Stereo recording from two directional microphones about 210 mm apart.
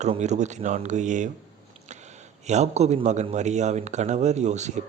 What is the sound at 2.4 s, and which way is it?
Speech, 30° right (ahead or behind).